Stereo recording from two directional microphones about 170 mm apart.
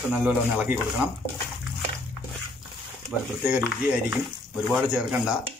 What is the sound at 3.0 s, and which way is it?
A man's voice, 10° right (ahead or behind).